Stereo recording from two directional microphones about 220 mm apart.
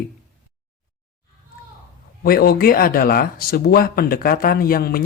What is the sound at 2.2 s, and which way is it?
Speech, 45° left (ahead or behind).